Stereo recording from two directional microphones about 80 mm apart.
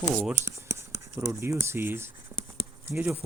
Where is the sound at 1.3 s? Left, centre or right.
Right.